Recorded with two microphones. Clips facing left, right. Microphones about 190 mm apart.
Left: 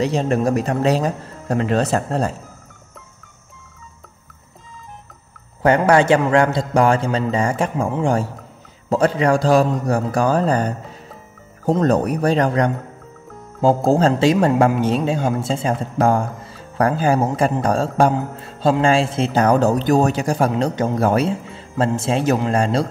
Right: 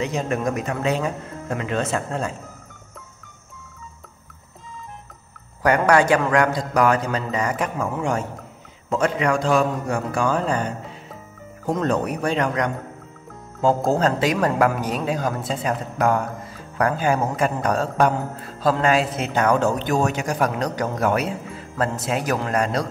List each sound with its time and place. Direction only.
0.0 s speech: 35° left (ahead or behind)
5.6 s a man's voice: 25° left (ahead or behind)
11.8 s a man's voice: 40° left (ahead or behind)